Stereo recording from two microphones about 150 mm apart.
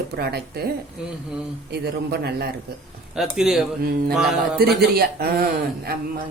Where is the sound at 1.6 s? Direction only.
90° right.